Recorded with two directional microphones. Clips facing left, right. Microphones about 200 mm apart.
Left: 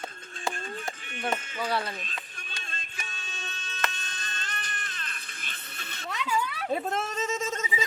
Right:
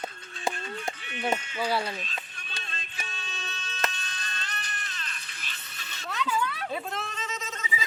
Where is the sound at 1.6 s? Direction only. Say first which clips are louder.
Right 1 dB; 5° right (ahead or behind).